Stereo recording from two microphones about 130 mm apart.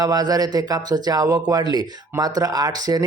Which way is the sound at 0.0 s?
30° right (ahead or behind).